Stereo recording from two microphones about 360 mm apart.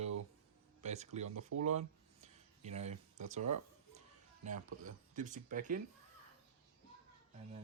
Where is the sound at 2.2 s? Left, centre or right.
Centre.